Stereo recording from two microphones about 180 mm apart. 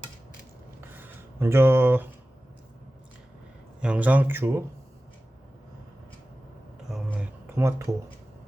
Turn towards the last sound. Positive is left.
turn(degrees=-15)  # may be behind; listen again after turning